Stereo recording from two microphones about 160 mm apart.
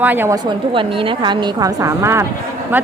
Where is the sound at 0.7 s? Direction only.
30° right (ahead or behind).